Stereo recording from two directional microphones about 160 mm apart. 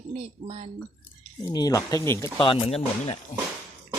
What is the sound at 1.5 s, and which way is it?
Speech, 25° left (ahead or behind).